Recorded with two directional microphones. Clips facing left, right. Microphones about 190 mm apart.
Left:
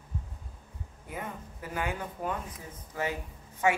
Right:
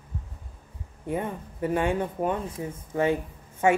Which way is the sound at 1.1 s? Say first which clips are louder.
Right 9 dB; 30° right (ahead or behind).